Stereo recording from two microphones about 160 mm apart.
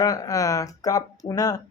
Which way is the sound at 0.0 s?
20° left (ahead or behind).